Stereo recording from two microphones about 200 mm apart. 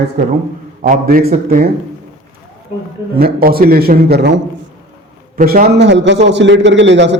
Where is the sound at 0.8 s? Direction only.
45° right (ahead or behind).